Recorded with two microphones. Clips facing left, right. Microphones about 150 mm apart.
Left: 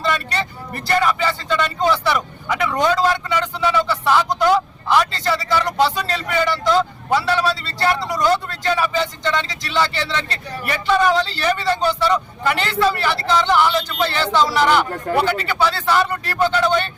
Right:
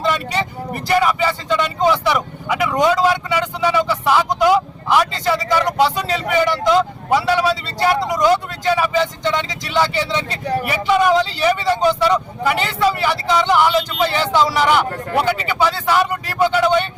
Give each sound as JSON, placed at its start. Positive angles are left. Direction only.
{"t": 0.0, "sound": "speech", "side_deg": -15}